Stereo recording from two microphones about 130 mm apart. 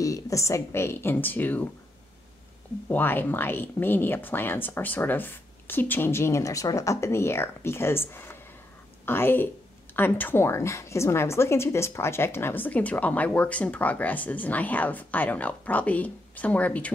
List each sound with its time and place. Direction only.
0.0 s a woman's voice: 25° left (ahead or behind)
2.9 s a woman's voice: 15° left (ahead or behind)